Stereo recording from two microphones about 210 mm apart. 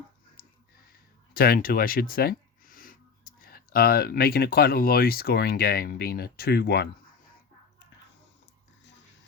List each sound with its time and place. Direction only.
1.3 s speech: 45° left (ahead or behind)